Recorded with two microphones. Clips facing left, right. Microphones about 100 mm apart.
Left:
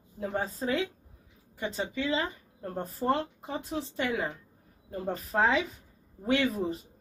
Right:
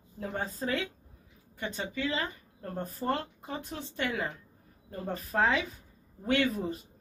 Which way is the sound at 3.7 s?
5° left (ahead or behind).